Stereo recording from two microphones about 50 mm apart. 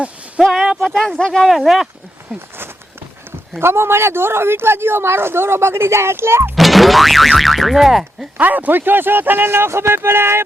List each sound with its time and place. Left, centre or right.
0.4 s speech: centre
0.9 s speech: centre
1.5 s speech: centre
3.6 s speech: right
6.6 s speech: centre
8.4 s speech: right